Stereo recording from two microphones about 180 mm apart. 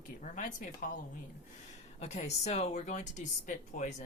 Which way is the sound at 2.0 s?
35° left (ahead or behind).